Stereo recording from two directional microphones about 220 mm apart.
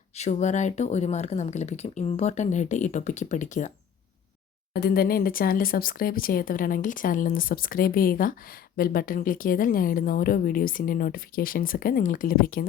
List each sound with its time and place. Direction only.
0.2 s speech: 30° left (ahead or behind)
4.7 s speech: 45° left (ahead or behind)